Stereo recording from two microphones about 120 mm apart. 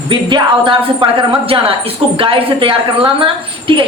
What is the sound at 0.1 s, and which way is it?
A woman's voice, 40° right (ahead or behind).